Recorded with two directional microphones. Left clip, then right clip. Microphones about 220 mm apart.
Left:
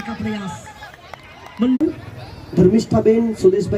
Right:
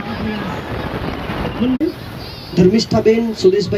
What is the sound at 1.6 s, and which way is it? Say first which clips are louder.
Speech: left 1 dB; centre (ahead or behind).